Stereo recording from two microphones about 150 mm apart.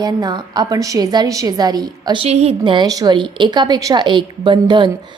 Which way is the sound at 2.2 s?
45° right (ahead or behind).